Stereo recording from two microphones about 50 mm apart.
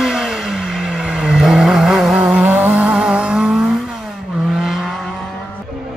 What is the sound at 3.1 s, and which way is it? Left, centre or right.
Vehicle, centre.